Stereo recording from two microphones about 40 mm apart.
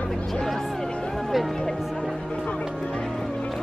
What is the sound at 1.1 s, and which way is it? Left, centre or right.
Music, centre.